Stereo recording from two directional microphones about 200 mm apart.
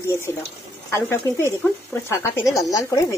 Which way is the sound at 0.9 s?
15° left (ahead or behind).